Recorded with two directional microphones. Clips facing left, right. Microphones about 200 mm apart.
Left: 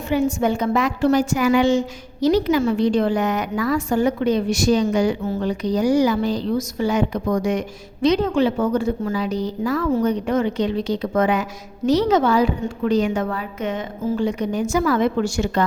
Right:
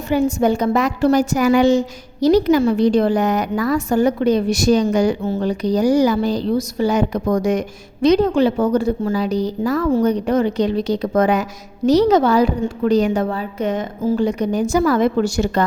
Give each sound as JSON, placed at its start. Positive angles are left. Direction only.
{"t": 0.1, "sound": "a woman's voice", "side_deg": -40}
{"t": 5.2, "sound": "a woman's voice", "side_deg": -30}